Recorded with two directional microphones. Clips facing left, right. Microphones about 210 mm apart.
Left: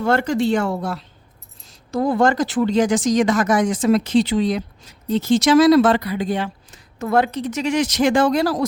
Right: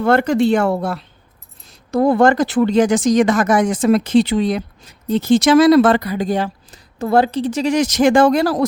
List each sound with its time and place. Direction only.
0.0 s speech: 60° right (ahead or behind)